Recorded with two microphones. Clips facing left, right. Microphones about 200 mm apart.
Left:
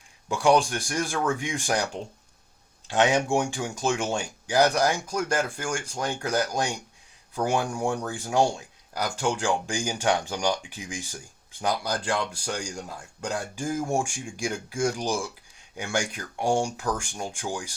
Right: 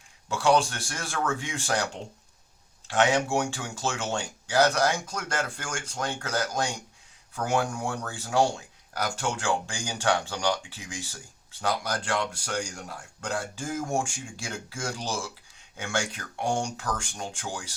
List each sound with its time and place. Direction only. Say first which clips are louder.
0.3 s speech: left 2 dB; 15° left (ahead or behind)
2.8 s speech: left 1 dB; 15° left (ahead or behind)
7.9 s speech: left 5 dB; 15° left (ahead or behind)